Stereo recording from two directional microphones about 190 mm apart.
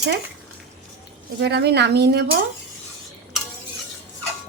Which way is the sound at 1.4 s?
60° right (ahead or behind).